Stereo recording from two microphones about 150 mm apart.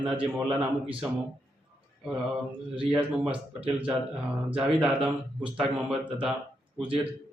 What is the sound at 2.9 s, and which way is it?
Speech, 10° right (ahead or behind).